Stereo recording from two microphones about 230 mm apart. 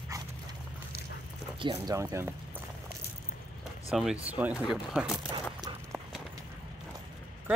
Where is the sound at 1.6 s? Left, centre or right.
Centre.